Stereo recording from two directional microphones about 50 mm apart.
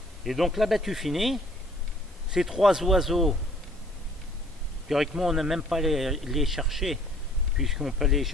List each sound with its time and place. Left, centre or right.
0.2 s speech: centre
4.8 s speech: centre